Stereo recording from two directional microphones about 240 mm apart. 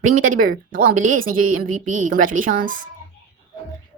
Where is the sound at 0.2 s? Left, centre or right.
Right.